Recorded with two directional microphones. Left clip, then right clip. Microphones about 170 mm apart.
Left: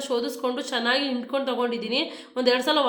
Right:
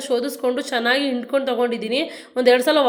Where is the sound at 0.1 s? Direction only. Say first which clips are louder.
Right 6 dB; 15° right (ahead or behind).